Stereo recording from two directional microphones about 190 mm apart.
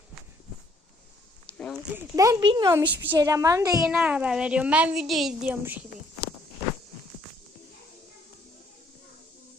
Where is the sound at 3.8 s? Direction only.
5° right (ahead or behind).